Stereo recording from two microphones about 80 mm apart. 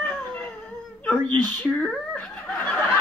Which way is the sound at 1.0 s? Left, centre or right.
Left.